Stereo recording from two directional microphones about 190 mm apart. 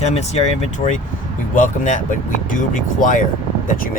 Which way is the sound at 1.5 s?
40° left (ahead or behind).